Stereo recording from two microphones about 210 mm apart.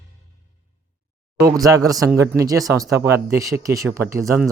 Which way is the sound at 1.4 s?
15° right (ahead or behind).